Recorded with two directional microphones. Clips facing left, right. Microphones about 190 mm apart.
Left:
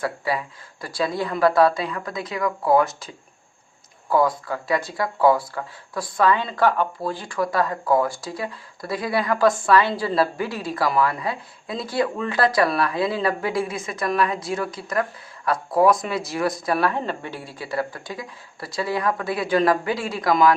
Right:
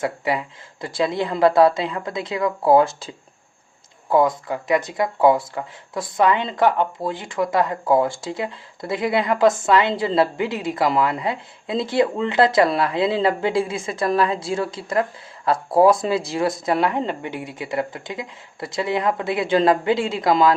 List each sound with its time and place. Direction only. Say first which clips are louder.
0.0 s speech: right 2 dB; 20° right (ahead or behind)
4.1 s speech: right 2 dB; 20° right (ahead or behind)